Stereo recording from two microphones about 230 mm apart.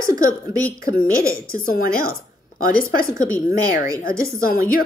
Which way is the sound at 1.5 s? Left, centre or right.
Left.